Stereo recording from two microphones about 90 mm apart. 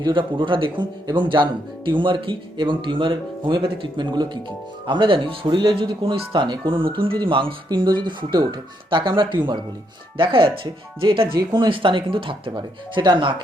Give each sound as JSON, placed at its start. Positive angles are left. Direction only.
{"t": 0.0, "sound": "speech", "side_deg": -65}
{"t": 4.9, "sound": "speech", "side_deg": -65}
{"t": 10.2, "sound": "speech", "side_deg": -75}
{"t": 11.3, "sound": "speech", "side_deg": -55}
{"t": 11.7, "sound": "speech", "side_deg": -70}